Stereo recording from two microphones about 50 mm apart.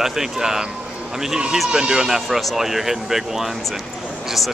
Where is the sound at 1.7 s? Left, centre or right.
Centre.